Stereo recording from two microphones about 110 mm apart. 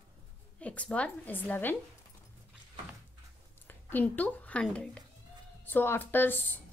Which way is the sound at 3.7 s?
15° left (ahead or behind).